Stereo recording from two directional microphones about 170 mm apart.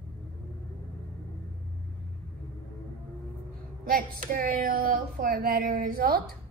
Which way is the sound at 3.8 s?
60° right (ahead or behind).